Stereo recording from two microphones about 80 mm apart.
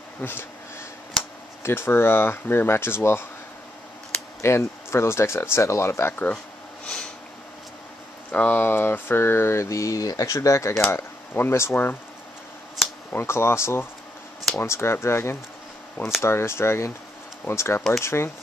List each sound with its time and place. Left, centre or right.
0.2 s bee: left
1.6 s speech: left
4.4 s speech: left
6.1 s speech: centre
8.3 s speech: centre; by 10.7 s left
10.8 s speech: left
13.1 s speech: left